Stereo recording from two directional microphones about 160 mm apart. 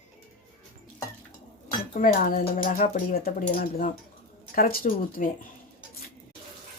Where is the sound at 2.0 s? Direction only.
55° left (ahead or behind).